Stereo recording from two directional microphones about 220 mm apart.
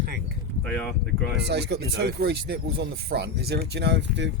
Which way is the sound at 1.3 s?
50° right (ahead or behind).